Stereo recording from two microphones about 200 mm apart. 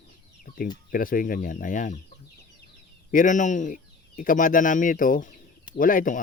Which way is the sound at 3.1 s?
40° left (ahead or behind).